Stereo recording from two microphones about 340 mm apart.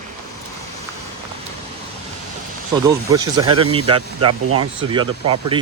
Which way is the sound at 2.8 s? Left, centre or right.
Centre.